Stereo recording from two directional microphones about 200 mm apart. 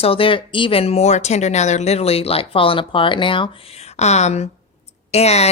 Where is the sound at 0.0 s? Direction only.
25° left (ahead or behind).